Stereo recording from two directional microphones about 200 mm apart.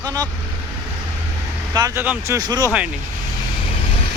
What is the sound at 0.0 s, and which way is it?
Speech, 20° right (ahead or behind).